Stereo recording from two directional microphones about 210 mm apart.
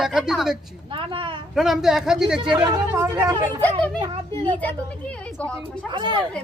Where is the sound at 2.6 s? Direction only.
15° right (ahead or behind).